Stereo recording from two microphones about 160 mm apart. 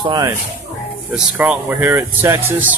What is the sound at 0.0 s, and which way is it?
Speech, 25° right (ahead or behind).